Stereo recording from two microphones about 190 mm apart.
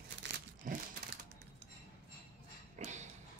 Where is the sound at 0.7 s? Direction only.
45° right (ahead or behind).